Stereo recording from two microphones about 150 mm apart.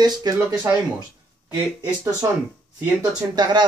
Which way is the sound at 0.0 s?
25° right (ahead or behind).